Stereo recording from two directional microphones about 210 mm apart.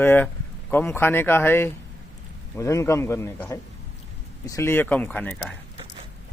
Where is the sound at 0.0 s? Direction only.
10° left (ahead or behind).